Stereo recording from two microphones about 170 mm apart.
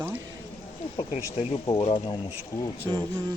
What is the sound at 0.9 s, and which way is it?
Speech, 35° left (ahead or behind).